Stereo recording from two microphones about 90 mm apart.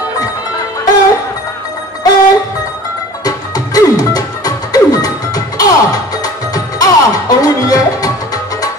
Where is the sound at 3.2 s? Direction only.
45° left (ahead or behind).